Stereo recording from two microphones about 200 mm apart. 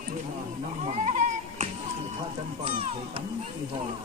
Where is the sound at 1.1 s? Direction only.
40° right (ahead or behind).